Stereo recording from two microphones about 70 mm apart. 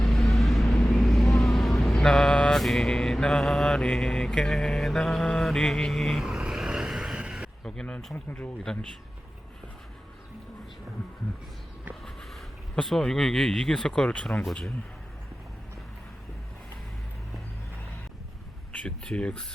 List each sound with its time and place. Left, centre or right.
0.0 s vehicle: centre
6.2 s vehicle: centre
7.6 s speech: centre
8.1 s speech: left
8.6 s speech: centre
12.7 s speech: centre
18.7 s speech: centre